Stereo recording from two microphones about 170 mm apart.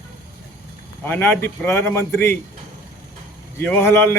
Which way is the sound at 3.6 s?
15° left (ahead or behind).